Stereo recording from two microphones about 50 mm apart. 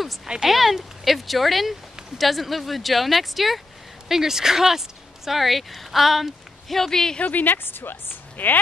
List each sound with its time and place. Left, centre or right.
0.5 s speech: centre
7.2 s a woman's voice: left